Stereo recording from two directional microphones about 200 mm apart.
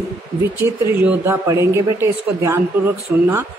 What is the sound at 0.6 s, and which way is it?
Speech, 10° right (ahead or behind).